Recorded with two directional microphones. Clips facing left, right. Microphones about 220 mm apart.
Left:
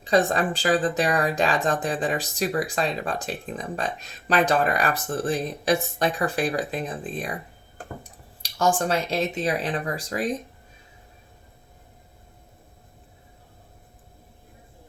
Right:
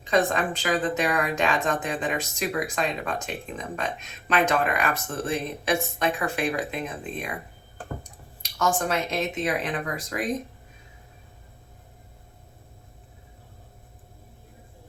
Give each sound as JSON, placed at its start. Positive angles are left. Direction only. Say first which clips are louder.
{"t": 0.0, "sound": "speech", "louder": "left 2 dB", "side_deg": 35}
{"t": 8.4, "sound": "speech", "louder": "left 3 dB", "side_deg": 30}